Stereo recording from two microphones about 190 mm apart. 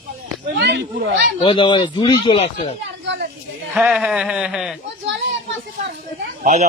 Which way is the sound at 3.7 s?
Centre (ahead or behind).